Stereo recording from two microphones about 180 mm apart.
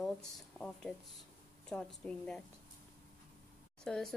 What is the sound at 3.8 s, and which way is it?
Speech, centre (ahead or behind).